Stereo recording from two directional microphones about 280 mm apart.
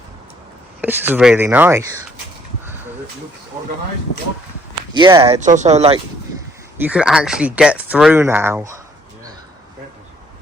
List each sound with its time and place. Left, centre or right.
0.8 s speech: centre
4.9 s speech: centre
6.8 s speech: centre